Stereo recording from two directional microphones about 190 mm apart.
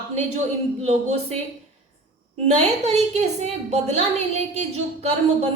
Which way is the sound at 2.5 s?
35° right (ahead or behind).